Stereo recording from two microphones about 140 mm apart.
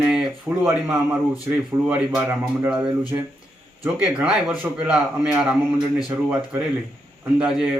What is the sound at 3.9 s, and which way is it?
A man's voice, 5° right (ahead or behind).